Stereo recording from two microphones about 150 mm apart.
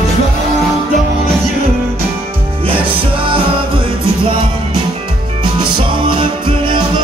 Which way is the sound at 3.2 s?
35° right (ahead or behind).